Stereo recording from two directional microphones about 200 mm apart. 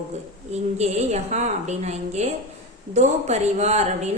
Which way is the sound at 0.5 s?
35° right (ahead or behind).